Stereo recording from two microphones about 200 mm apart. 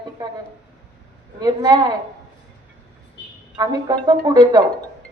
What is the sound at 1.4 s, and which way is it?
Speech, 20° right (ahead or behind).